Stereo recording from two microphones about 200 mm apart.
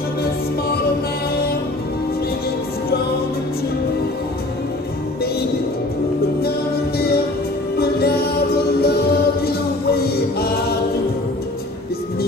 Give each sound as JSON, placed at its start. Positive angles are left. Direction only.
{"t": 7.7, "sound": "music", "side_deg": 50}